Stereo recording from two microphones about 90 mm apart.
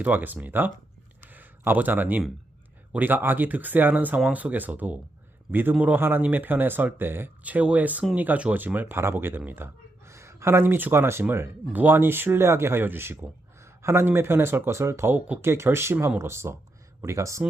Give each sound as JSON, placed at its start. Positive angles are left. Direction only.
{"t": 0.0, "sound": "speech", "side_deg": -20}
{"t": 1.2, "sound": "a sound", "side_deg": -20}
{"t": 2.9, "sound": "a man's voice", "side_deg": -20}